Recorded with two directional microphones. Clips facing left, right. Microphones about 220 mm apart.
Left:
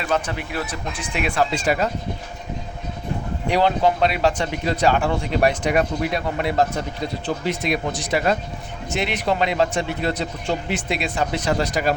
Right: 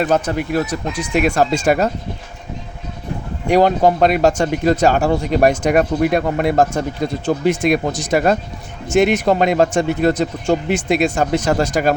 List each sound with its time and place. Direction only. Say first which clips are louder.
0.0 s speech: right 7 dB; 45° right (ahead or behind)
3.5 s speech: right 6 dB; 45° right (ahead or behind)